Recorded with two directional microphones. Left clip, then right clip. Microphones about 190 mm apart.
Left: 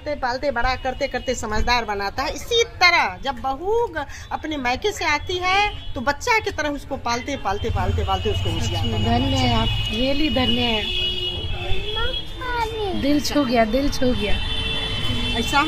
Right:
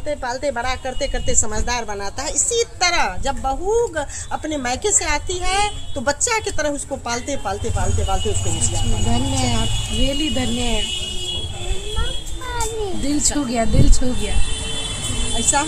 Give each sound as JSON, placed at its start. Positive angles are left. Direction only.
{"t": 0.1, "sound": "a woman's voice", "side_deg": 0}
{"t": 9.1, "sound": "speech", "side_deg": 25}
{"t": 10.0, "sound": "speech", "side_deg": 10}
{"t": 12.4, "sound": "speech", "side_deg": 20}
{"t": 15.3, "sound": "speech", "side_deg": -25}